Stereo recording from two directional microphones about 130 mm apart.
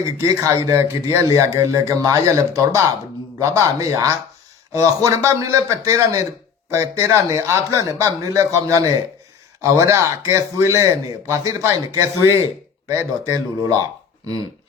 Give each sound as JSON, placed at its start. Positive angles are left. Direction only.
{"t": 0.0, "sound": "a man's voice", "side_deg": -25}
{"t": 3.3, "sound": "a man's voice", "side_deg": -25}